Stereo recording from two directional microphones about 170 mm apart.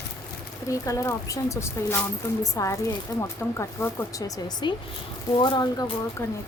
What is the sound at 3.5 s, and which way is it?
Speech, 15° left (ahead or behind).